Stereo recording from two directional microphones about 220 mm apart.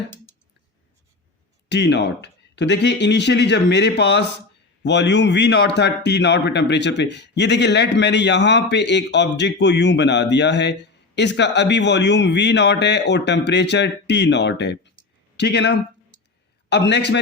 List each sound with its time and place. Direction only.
1.7 s a man's voice: 50° left (ahead or behind)